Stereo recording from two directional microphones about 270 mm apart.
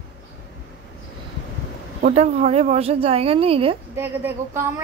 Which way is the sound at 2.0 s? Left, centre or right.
Right.